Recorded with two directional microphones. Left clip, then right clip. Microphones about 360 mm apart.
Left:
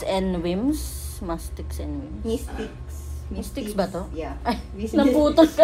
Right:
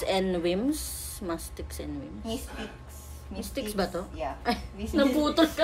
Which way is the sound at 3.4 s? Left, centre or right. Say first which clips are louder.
Left 4 dB; centre.